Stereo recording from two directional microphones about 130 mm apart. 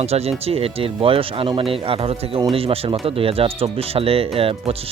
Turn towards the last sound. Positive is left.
turn(degrees=-50)  # may be behind; listen again after turning